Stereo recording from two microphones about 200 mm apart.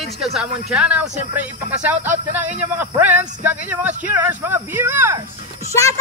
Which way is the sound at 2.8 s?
10° right (ahead or behind).